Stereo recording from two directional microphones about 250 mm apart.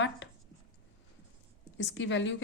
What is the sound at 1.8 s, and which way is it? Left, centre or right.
Speech, left.